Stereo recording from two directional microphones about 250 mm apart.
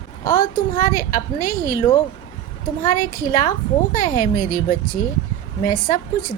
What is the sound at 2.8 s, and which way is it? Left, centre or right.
A woman's voice, left.